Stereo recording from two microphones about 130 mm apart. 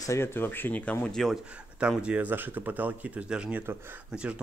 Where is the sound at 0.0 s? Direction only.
20° left (ahead or behind).